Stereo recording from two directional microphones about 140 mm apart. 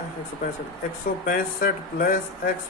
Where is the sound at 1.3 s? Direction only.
80° left.